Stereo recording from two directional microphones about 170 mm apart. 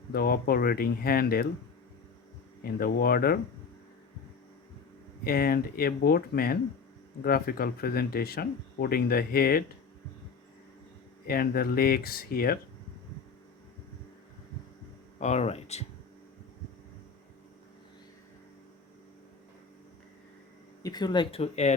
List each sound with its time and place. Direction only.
0.1 s speech: 65° left (ahead or behind)
2.7 s speech: 60° left (ahead or behind)
5.2 s speech: 60° left (ahead or behind)
11.3 s speech: 60° left (ahead or behind)
15.2 s speech: 40° left (ahead or behind)
20.8 s speech: 25° left (ahead or behind); by 21.8 s 40° left (ahead or behind)